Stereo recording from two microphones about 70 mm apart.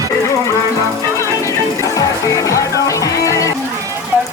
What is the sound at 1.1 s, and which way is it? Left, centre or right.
Music, left.